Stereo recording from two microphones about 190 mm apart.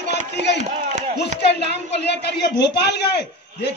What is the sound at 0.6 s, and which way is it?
Speech, 35° right (ahead or behind).